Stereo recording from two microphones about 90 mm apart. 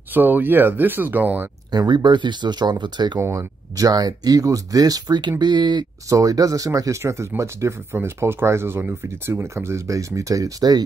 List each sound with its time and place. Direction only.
0.1 s speech: 20° right (ahead or behind)
1.7 s speech: 50° right (ahead or behind)
3.2 s speech: 35° right (ahead or behind); by 5.9 s 55° right (ahead or behind)
6.0 s speech: 40° right (ahead or behind)